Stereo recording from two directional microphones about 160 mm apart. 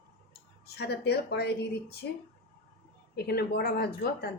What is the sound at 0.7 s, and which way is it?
A woman's voice, 90° left.